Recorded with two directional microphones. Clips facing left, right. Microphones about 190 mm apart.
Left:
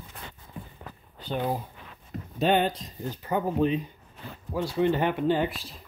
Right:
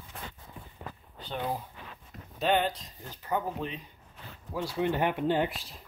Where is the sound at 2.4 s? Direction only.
20° left (ahead or behind).